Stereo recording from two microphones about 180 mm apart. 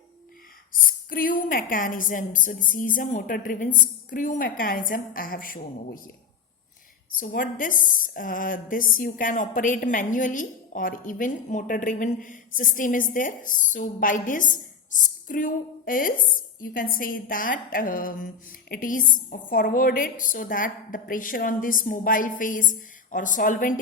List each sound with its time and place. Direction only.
0.7 s a woman's voice: 50° left (ahead or behind)
7.2 s a woman's voice: 50° left (ahead or behind)